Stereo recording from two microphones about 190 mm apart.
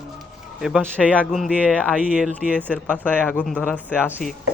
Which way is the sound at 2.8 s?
10° left (ahead or behind).